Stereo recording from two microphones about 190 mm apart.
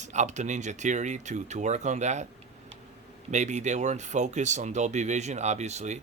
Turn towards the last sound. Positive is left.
turn(degrees=-35)  # may be behind; listen again after turning